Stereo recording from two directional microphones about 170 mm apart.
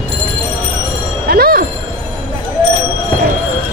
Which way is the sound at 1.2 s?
65° right (ahead or behind).